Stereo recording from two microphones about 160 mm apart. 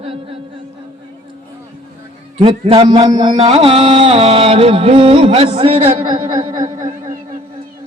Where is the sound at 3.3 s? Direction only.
40° right (ahead or behind).